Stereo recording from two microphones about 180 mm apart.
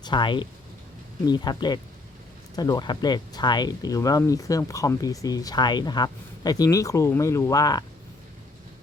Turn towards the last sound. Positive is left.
turn(degrees=20)  # may be behind; listen again after turning